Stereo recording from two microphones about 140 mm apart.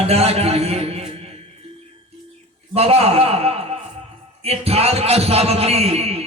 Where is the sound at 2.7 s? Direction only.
45° right (ahead or behind).